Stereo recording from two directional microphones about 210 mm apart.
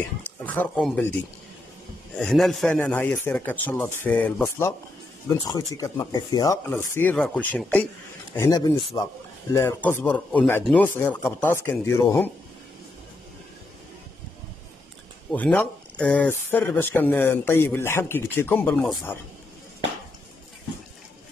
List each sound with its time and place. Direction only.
0.4 s speech: 5° left (ahead or behind)
2.1 s speech: centre (ahead or behind)
8.4 s speech: 15° left (ahead or behind)
15.3 s speech: 5° left (ahead or behind)